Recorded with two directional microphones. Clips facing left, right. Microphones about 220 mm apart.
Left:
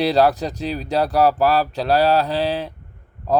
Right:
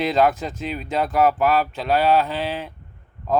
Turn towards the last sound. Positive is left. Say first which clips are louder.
# left 2 dB
turn(degrees=40)  # may be behind; listen again after turning